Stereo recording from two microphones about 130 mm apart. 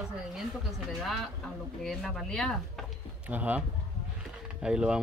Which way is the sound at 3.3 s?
10° right (ahead or behind).